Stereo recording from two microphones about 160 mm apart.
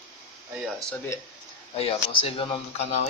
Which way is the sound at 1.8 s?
35° left (ahead or behind).